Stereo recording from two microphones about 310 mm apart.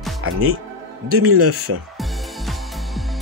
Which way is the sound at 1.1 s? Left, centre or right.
Right.